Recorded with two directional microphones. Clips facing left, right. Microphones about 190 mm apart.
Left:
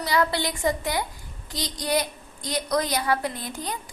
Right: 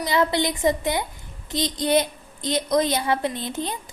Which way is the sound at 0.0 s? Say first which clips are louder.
Right 3 dB; 20° right (ahead or behind).